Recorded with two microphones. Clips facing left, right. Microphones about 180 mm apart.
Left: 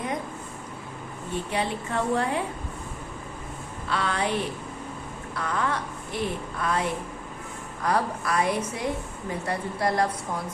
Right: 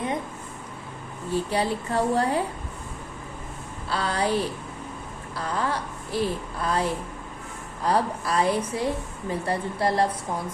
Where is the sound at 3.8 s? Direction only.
35° right (ahead or behind).